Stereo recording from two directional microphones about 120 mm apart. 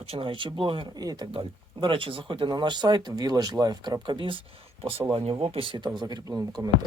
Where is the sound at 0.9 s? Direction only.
35° right (ahead or behind).